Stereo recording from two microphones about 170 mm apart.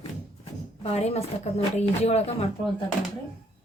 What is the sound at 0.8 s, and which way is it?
Speech, 35° left (ahead or behind).